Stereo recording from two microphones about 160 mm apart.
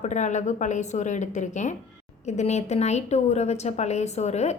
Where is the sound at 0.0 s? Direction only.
50° left (ahead or behind).